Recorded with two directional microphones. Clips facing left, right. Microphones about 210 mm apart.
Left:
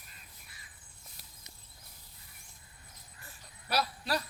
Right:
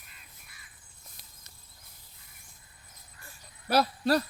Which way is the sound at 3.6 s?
50° right (ahead or behind).